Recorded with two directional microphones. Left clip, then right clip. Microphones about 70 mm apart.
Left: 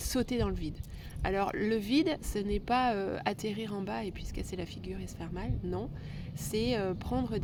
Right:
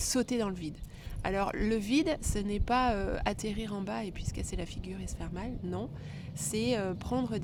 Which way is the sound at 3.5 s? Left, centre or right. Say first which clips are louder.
Even; centre.